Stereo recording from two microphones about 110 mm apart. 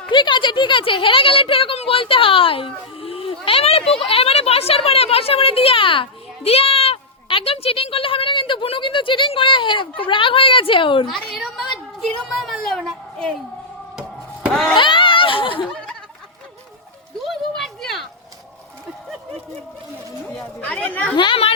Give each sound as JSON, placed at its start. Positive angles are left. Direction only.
{"t": 0.1, "sound": "a sound", "side_deg": 45}
{"t": 4.0, "sound": "speech", "side_deg": 60}
{"t": 11.1, "sound": "speech", "side_deg": 0}
{"t": 14.5, "sound": "speech", "side_deg": 0}
{"t": 14.8, "sound": "speech", "side_deg": 50}
{"t": 17.6, "sound": "a sound", "side_deg": 0}
{"t": 20.6, "sound": "speech", "side_deg": 10}
{"t": 21.2, "sound": "speech", "side_deg": 45}